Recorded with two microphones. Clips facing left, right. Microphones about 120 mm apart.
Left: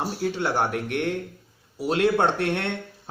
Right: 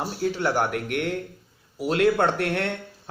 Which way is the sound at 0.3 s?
25° left (ahead or behind).